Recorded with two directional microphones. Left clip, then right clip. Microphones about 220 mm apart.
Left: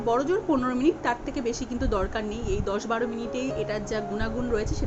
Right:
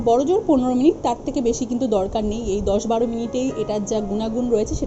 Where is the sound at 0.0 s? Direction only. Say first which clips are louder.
Right 7 dB; 20° left (ahead or behind).